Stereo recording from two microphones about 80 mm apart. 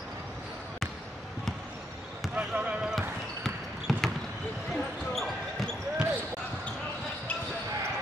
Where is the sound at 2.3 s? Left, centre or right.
Centre.